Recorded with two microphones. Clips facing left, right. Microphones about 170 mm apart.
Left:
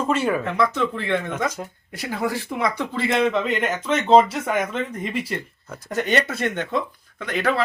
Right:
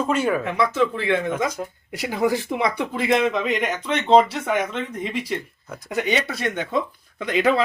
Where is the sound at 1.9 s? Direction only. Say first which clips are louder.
Right 4 dB; 15° right (ahead or behind).